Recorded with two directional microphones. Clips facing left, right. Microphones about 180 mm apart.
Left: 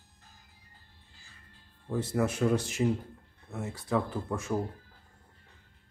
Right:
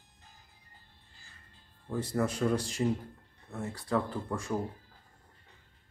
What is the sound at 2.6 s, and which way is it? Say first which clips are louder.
Speech: left 2 dB; 20° left (ahead or behind).